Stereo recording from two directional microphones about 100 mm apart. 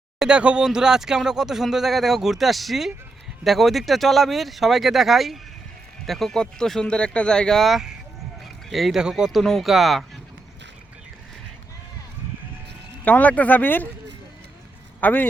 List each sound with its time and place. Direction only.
0.2 s speech: 10° right (ahead or behind)
13.1 s speech: 15° left (ahead or behind)
15.0 s speech: 20° left (ahead or behind)